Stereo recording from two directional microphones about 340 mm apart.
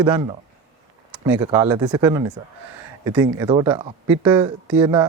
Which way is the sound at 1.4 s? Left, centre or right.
Centre.